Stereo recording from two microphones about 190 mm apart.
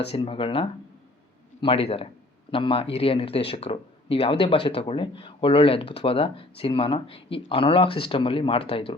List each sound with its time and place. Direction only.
0.1 s speech: 30° left (ahead or behind)